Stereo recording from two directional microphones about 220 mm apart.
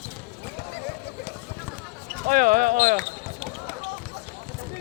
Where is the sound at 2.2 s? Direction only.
35° right (ahead or behind).